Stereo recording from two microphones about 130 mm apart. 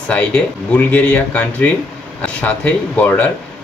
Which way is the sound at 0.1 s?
10° left (ahead or behind).